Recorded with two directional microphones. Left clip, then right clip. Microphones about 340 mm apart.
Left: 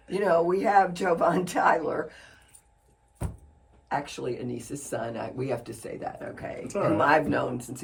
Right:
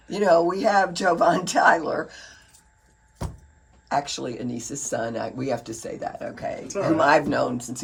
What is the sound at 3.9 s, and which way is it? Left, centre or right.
Speech, right.